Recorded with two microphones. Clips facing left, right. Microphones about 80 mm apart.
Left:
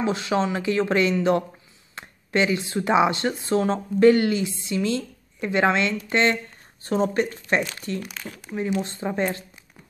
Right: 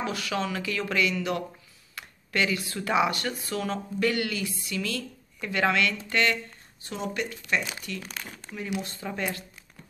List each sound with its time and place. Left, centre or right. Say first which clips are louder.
0.0 s speech: left 7 dB; left
8.0 s speech: left 4 dB; centre
8.8 s speech: left 7 dB; left